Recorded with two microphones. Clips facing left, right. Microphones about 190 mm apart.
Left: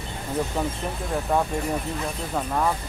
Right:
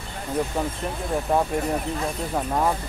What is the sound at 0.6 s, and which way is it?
Speech, 10° right (ahead or behind).